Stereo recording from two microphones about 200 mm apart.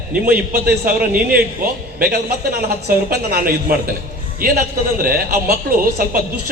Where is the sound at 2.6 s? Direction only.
50° right (ahead or behind).